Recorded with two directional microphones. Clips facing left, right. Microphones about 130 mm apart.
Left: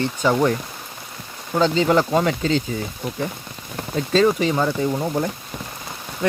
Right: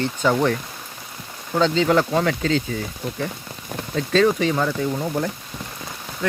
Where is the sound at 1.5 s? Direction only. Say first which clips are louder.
Left 1 dB; 5° left (ahead or behind).